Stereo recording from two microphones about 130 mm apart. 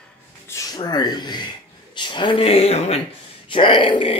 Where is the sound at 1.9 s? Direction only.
40° left (ahead or behind); by 3.0 s 55° left (ahead or behind).